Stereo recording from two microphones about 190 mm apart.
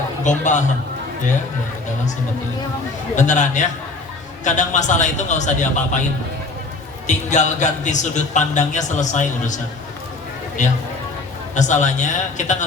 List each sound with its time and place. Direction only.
0.3 s a man's voice: 40° left (ahead or behind)
3.2 s a man's voice: 40° left (ahead or behind)
7.1 s a man's voice: 40° left (ahead or behind)
10.6 s a man's voice: 40° left (ahead or behind)